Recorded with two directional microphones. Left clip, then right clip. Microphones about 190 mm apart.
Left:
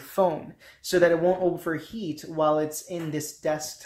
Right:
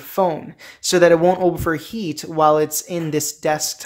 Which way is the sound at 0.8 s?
35° right (ahead or behind).